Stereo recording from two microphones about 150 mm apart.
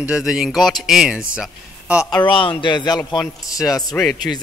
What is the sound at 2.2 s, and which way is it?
A man's voice, 35° left (ahead or behind).